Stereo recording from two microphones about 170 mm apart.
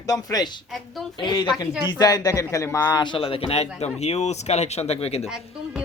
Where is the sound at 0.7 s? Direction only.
Centre (ahead or behind).